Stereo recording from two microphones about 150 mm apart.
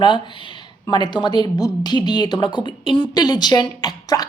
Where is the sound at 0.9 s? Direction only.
30° left (ahead or behind).